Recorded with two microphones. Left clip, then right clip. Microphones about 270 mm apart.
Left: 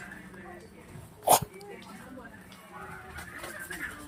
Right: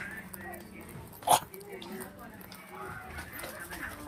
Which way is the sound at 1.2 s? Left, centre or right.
Centre.